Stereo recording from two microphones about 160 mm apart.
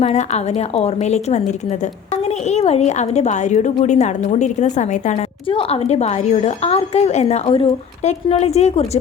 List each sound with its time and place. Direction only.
0.0 s a woman's voice: 40° left (ahead or behind)
2.5 s a woman's voice: 40° left (ahead or behind)
5.5 s a woman's voice: 35° left (ahead or behind)